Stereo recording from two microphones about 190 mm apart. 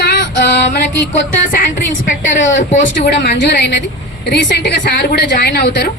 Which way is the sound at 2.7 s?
40° left (ahead or behind).